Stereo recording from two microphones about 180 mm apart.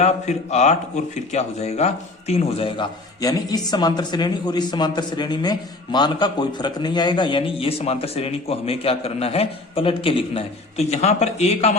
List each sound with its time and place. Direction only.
0.0 s speech: 40° left (ahead or behind)